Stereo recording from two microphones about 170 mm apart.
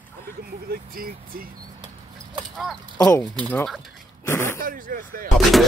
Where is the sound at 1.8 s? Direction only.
25° right (ahead or behind).